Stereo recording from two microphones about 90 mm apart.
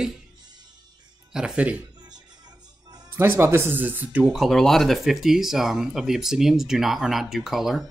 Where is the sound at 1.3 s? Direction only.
10° right (ahead or behind).